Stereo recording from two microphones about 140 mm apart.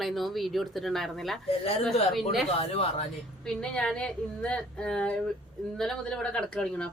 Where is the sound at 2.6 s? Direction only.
45° left (ahead or behind).